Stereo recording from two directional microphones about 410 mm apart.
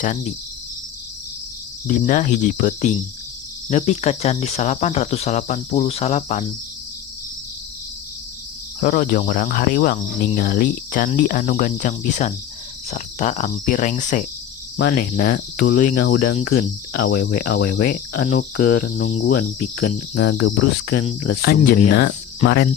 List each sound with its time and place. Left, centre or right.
0.0 s cricket: centre
1.9 s cricket: centre
8.8 s cricket: centre